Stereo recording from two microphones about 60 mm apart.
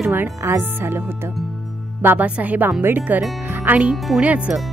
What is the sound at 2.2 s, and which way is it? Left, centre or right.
Speech, right.